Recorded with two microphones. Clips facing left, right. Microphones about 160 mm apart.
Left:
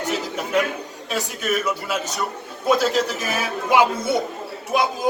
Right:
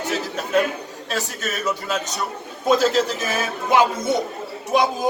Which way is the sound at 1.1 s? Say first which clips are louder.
Left 3 dB; 10° left (ahead or behind).